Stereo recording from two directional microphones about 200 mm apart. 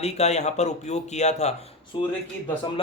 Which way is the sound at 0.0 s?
35° left (ahead or behind).